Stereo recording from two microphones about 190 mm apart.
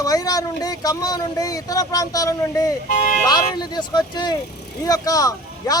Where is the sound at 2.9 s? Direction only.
40° left (ahead or behind).